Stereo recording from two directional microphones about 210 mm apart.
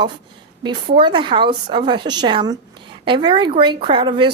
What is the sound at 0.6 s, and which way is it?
Speech, 20° right (ahead or behind).